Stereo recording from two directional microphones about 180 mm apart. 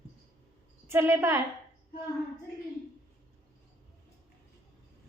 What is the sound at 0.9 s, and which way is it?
Speech, 15° right (ahead or behind).